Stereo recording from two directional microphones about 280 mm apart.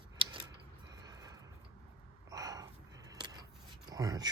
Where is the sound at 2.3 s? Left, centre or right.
Centre.